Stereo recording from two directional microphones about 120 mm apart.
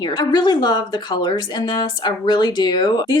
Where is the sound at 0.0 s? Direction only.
35° left (ahead or behind).